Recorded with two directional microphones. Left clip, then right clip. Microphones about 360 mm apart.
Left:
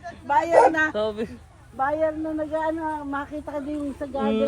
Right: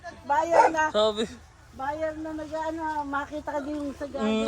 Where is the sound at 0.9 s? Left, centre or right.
Centre.